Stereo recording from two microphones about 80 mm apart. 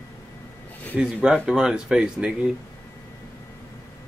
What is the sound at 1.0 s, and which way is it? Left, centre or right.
Speech, centre.